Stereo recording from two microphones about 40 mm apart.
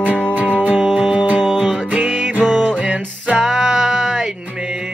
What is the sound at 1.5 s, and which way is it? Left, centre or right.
Music, right.